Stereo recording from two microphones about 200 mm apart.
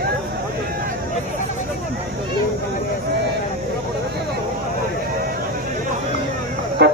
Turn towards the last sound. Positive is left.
turn(degrees=-55)  # may be behind; listen again after turning